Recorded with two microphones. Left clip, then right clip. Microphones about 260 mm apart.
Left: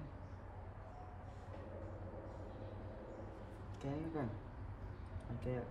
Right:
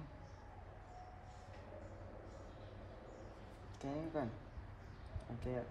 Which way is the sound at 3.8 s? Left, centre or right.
Right.